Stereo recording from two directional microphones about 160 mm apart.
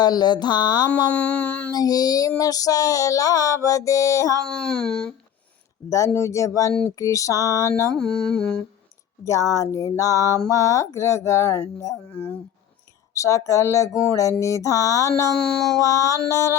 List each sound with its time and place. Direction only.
0.0 s music: 25° left (ahead or behind)
1.1 s a sound: 10° left (ahead or behind)
1.7 s music: 25° left (ahead or behind)
4.4 s speech: 5° left (ahead or behind)
6.1 s music: 20° left (ahead or behind)
7.9 s speech: 5° left (ahead or behind)
9.2 s music: 20° left (ahead or behind)
13.1 s music: 20° left (ahead or behind)
15.4 s speech: 5° left (ahead or behind)
15.8 s music: 20° left (ahead or behind)